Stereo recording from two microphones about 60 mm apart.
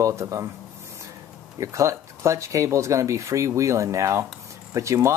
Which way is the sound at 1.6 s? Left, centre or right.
Right.